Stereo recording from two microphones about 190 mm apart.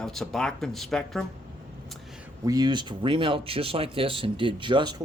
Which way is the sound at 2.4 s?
20° right (ahead or behind).